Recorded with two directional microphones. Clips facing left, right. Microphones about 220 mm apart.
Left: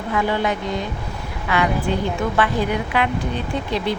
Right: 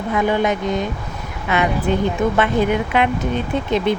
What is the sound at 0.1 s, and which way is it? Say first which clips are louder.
A woman's voice: right 3 dB; 20° right (ahead or behind).